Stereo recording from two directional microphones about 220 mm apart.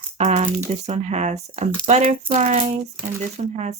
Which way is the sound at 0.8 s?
30° right (ahead or behind).